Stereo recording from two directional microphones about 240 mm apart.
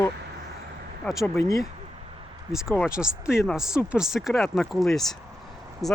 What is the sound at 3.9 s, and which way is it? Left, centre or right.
Speech, centre.